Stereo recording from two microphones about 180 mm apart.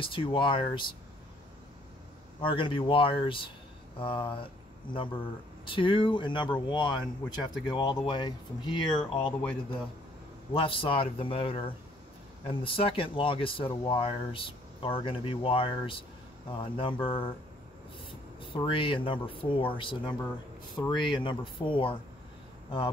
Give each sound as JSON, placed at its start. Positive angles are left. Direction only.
{"t": 0.0, "sound": "speech", "side_deg": 30}
{"t": 2.4, "sound": "speech", "side_deg": 30}
{"t": 5.7, "sound": "speech", "side_deg": 30}
{"t": 10.5, "sound": "a man's voice", "side_deg": 30}
{"t": 18.4, "sound": "speech", "side_deg": 30}